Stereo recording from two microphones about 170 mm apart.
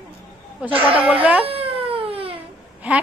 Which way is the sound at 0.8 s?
10° right (ahead or behind).